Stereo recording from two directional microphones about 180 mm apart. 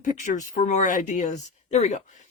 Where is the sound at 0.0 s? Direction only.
45° left (ahead or behind).